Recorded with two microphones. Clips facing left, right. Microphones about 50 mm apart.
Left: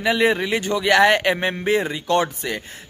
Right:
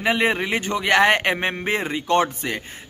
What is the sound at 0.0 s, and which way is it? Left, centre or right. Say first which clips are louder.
A man's voice: left 2 dB; right.